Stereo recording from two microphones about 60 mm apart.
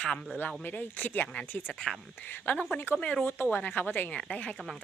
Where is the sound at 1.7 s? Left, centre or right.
Centre.